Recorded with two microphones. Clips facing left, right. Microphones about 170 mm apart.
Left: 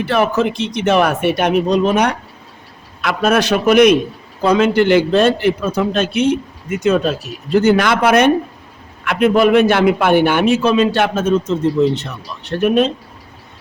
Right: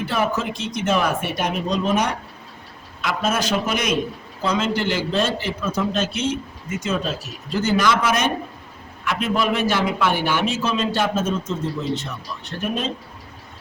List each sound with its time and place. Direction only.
0.0 s a man's voice: 65° left (ahead or behind)